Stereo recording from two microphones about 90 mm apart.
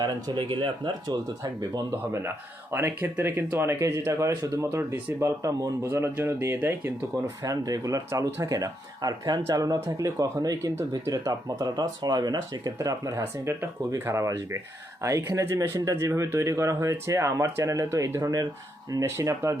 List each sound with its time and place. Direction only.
0.3 s speech: 60° right (ahead or behind)
1.9 s speech: 25° right (ahead or behind)
7.4 s speech: 40° right (ahead or behind)